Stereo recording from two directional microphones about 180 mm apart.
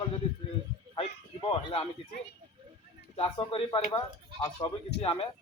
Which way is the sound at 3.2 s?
30° left (ahead or behind).